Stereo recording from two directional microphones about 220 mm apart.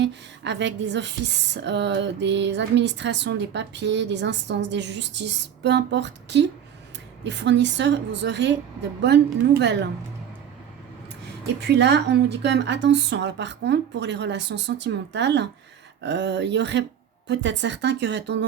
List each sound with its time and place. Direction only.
0.0 s speech: 50° right (ahead or behind)
11.7 s speech: 50° right (ahead or behind)